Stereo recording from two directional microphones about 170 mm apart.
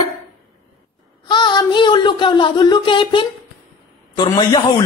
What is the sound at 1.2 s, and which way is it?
A man's voice, 25° left (ahead or behind).